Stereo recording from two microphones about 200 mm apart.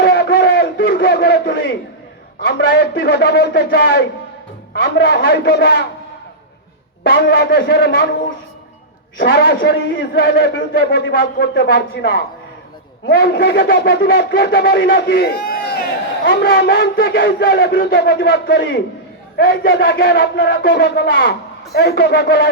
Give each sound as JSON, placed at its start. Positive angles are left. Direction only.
{"t": 0.0, "sound": "a sound", "side_deg": 55}
{"t": 2.4, "sound": "a man's voice", "side_deg": 50}
{"t": 7.1, "sound": "a man's voice", "side_deg": 55}
{"t": 9.1, "sound": "a man's voice", "side_deg": 50}
{"t": 10.8, "sound": "a man's voice", "side_deg": 50}